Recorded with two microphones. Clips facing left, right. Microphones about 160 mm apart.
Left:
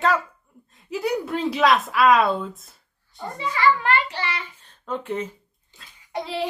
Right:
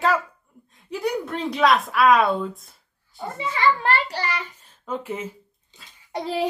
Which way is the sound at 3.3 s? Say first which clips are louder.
Left 1 dB; 25° right (ahead or behind).